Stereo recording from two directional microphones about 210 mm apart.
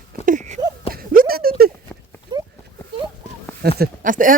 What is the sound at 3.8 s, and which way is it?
Speech, 40° right (ahead or behind).